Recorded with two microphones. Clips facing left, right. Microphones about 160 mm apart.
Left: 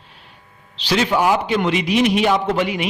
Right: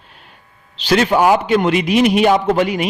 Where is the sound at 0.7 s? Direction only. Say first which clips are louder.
Right 4 dB; 50° right (ahead or behind).